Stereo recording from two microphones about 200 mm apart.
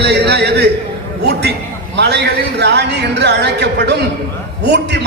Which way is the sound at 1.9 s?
60° right (ahead or behind).